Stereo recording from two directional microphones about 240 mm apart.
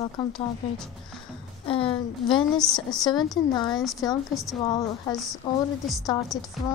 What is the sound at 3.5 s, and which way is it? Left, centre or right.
Speech, centre.